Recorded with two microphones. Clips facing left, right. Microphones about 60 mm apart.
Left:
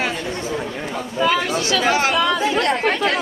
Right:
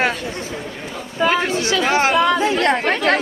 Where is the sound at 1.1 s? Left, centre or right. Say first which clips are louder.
Right 1 dB; right.